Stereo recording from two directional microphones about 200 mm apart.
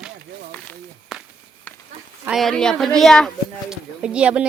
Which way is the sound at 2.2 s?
Centre (ahead or behind).